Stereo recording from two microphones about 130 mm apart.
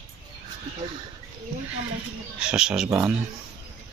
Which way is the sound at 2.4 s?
5° right (ahead or behind).